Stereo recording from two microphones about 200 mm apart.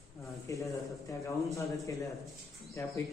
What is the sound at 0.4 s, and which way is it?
Speech, 15° left (ahead or behind).